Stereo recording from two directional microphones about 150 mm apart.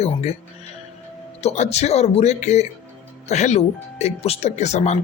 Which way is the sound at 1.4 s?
45° left (ahead or behind).